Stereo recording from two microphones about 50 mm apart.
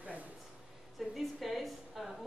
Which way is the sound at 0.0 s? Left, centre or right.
Right.